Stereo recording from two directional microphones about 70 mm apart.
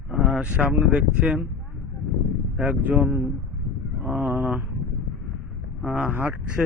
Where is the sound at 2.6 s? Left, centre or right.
Right.